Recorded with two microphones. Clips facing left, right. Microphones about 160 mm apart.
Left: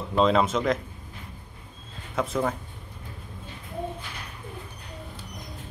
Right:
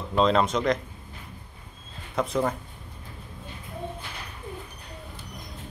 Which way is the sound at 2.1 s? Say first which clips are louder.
Right 1 dB; centre (ahead or behind).